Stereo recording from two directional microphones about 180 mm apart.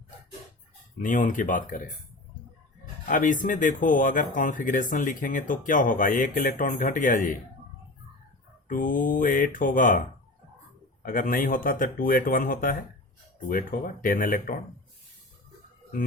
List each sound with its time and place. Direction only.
1.0 s speech: 45° left (ahead or behind)
3.1 s speech: 45° left (ahead or behind)
8.6 s speech: 50° left (ahead or behind)
11.0 s speech: 50° left (ahead or behind)